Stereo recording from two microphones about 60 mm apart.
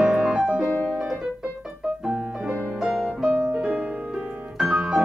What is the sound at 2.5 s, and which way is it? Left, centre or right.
Music, centre.